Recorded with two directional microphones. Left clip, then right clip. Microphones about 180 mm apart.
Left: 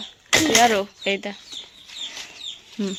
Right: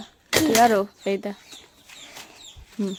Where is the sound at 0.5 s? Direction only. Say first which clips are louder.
Right 2 dB; 20° right (ahead or behind).